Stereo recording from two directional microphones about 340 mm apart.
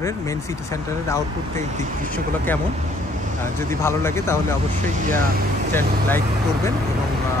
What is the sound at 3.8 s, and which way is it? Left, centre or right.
Speech, centre.